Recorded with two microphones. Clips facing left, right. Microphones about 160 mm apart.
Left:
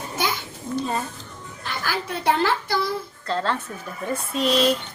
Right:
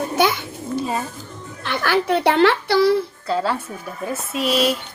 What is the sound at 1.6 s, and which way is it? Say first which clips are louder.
Speech: right 9 dB; 70° right (ahead or behind).